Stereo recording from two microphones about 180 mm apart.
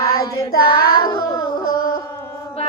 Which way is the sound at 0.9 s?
25° left (ahead or behind).